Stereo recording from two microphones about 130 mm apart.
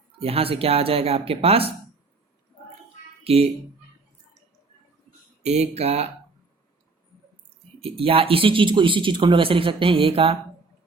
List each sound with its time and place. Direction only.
0.2 s speech: 50° right (ahead or behind)
3.3 s speech: 50° right (ahead or behind)
5.4 s speech: 55° right (ahead or behind)
7.8 s speech: 45° right (ahead or behind)